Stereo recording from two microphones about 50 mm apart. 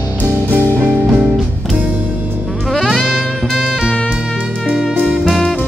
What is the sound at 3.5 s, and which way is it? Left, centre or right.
Music, centre.